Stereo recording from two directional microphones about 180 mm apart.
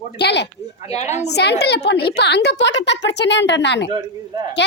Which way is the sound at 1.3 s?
65° left (ahead or behind).